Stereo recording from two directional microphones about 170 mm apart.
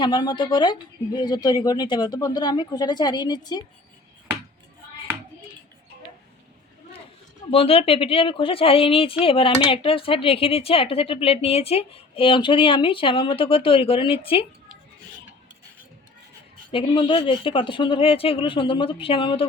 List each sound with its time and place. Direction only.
0.0 s speech: 25° left (ahead or behind)
7.5 s speech: 35° left (ahead or behind)
16.7 s speech: 30° left (ahead or behind)